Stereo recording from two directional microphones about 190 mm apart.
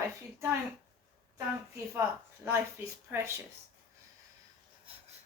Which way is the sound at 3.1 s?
10° right (ahead or behind).